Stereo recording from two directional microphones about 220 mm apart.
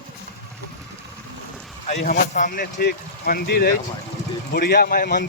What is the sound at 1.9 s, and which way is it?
Speech, 35° left (ahead or behind).